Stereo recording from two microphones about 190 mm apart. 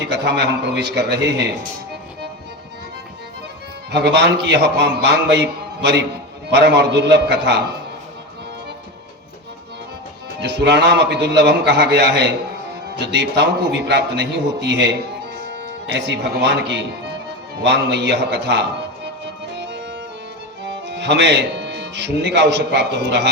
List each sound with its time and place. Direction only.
0.0 s a man's voice: 65° right (ahead or behind)
3.9 s a man's voice: 65° right (ahead or behind)
10.4 s a man's voice: 65° right (ahead or behind)
19.5 s music: 65° right (ahead or behind)
20.7 s speech: 65° right (ahead or behind)